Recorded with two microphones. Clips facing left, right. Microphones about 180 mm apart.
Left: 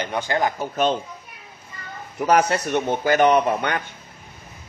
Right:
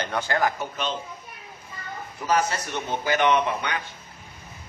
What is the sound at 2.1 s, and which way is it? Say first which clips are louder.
Speech: left 6 dB; 65° left (ahead or behind).